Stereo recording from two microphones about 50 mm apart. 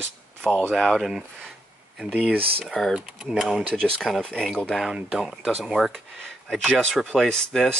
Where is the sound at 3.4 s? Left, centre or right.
Centre.